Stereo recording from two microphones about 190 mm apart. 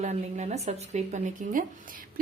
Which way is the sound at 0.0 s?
35° right (ahead or behind).